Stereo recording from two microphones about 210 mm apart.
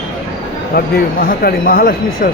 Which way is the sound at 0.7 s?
45° left (ahead or behind).